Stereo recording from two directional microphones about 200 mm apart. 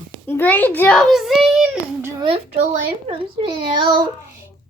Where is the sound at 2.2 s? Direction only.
30° right (ahead or behind).